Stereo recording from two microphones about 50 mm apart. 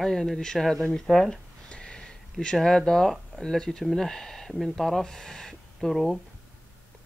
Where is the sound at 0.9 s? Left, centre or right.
Centre.